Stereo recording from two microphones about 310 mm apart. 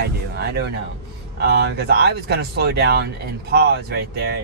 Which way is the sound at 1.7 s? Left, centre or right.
Right.